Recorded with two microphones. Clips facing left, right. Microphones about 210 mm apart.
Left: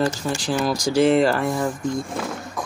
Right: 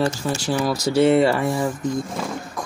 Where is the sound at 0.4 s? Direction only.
5° right (ahead or behind).